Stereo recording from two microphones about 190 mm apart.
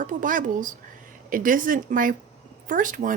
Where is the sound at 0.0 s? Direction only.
45° right (ahead or behind).